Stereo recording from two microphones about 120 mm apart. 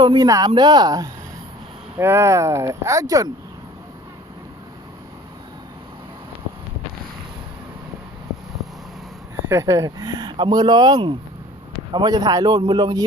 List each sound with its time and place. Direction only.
0.0 s speech: 35° right (ahead or behind)
2.0 s speech: 20° right (ahead or behind)
9.5 s speech: 25° right (ahead or behind)